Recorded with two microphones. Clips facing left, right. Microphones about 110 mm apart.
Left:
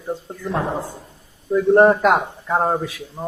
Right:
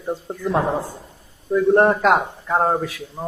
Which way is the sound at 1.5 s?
Centre (ahead or behind).